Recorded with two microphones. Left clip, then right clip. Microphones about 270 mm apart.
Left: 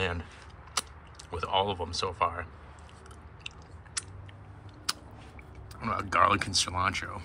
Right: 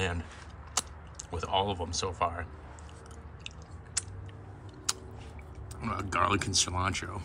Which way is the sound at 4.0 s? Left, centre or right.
Centre.